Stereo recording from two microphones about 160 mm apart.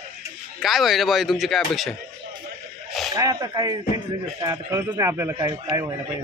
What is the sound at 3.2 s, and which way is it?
A man's voice, 25° right (ahead or behind).